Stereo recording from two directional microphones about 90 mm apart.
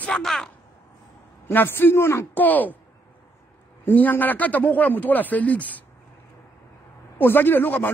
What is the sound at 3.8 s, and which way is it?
A man's voice, 20° left (ahead or behind).